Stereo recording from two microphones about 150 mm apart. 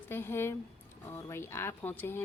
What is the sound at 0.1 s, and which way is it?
Speech, 15° left (ahead or behind).